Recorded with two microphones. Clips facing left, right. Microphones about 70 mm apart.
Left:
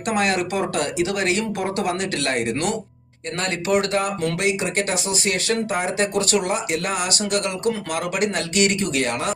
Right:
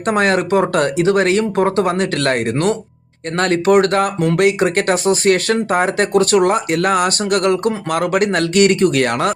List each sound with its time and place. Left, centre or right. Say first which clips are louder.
0.0 s speech: right 6 dB; right